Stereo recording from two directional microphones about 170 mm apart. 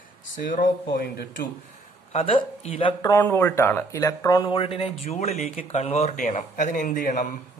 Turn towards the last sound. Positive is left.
turn(degrees=45)  # may be behind; listen again after turning